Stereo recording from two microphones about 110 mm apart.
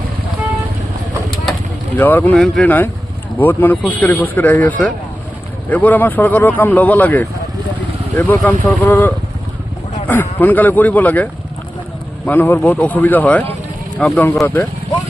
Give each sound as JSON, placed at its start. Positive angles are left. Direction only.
{"t": 2.0, "sound": "speech", "side_deg": 15}
{"t": 2.3, "sound": "speech", "side_deg": 5}
{"t": 2.6, "sound": "speech", "side_deg": 15}